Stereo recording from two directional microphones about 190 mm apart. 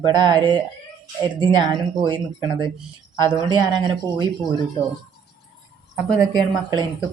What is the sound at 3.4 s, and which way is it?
Speech, 25° right (ahead or behind).